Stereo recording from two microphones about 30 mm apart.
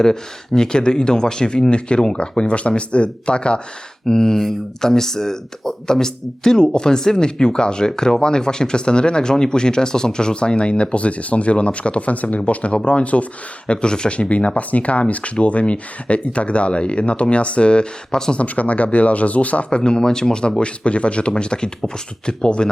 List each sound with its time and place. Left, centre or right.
0.0 s speech: centre; by 3.6 s left
4.0 s speech: centre; by 12.4 s left
12.5 s speech: left
13.8 s speech: left
14.2 s speech: left
18.3 s speech: left
19.7 s speech: left
20.6 s speech: left